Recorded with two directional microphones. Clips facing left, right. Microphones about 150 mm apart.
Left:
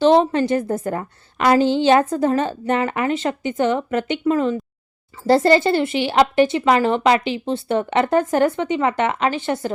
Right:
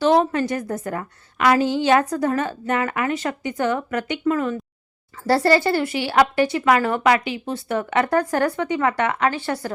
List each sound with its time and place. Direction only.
0.0 s a woman's voice: 30° left (ahead or behind)